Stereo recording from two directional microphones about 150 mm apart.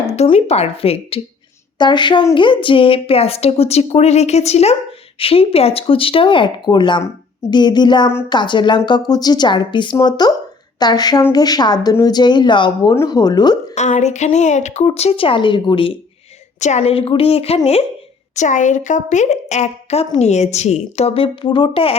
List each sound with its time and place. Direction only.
0.1 s a woman's voice: 45° left (ahead or behind); by 13.7 s 30° left (ahead or behind)
13.7 s a woman's voice: 50° left (ahead or behind); by 15.9 s 35° left (ahead or behind)
16.6 s speech: 50° left (ahead or behind)
18.3 s a woman's voice: 55° left (ahead or behind); by 21.9 s 40° left (ahead or behind)